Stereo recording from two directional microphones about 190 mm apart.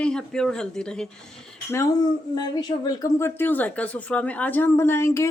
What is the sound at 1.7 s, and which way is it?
Speech, 20° left (ahead or behind).